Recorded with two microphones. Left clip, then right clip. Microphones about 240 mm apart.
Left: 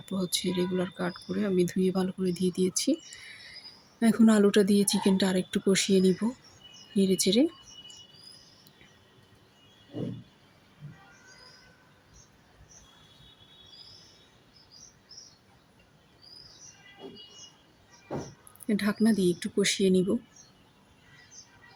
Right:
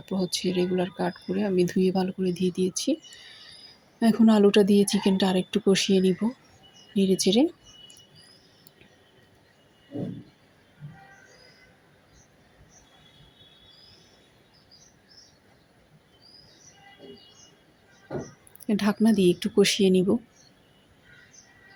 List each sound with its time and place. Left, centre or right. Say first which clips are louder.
0.0 s speech: right 3 dB; centre
18.7 s speech: right 3 dB; centre